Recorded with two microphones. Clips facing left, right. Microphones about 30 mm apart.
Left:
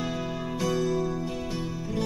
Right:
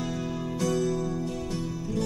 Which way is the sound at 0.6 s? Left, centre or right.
Centre.